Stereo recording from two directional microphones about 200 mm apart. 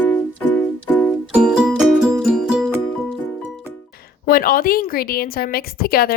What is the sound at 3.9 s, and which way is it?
A woman's voice, 50° left (ahead or behind).